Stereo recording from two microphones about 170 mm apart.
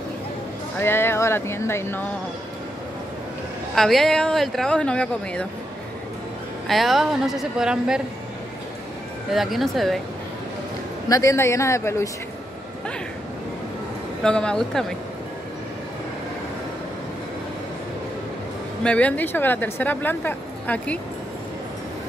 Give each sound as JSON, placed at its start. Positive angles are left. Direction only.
{"t": 0.7, "sound": "a woman's voice", "side_deg": 15}
{"t": 3.7, "sound": "speech", "side_deg": 0}
{"t": 6.7, "sound": "speech", "side_deg": 0}
{"t": 9.3, "sound": "speech", "side_deg": 0}
{"t": 11.1, "sound": "a woman's voice", "side_deg": 20}
{"t": 14.2, "sound": "speech", "side_deg": 5}
{"t": 18.8, "sound": "a woman's voice", "side_deg": 5}